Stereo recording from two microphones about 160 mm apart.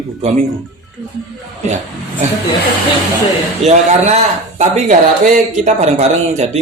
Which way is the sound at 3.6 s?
45° right (ahead or behind).